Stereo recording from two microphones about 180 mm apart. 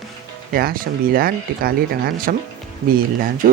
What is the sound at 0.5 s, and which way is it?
Speech, 55° right (ahead or behind).